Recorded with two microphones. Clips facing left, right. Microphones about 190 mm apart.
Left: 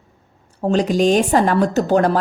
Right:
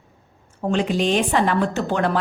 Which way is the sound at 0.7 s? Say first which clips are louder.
Left 5 dB; 40° left (ahead or behind).